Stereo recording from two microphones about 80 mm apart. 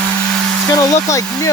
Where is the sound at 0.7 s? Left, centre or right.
Left.